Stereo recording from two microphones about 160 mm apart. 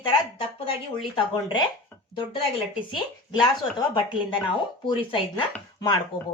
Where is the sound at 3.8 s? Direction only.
30° left (ahead or behind).